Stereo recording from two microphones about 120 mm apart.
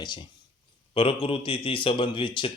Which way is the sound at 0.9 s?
50° left (ahead or behind).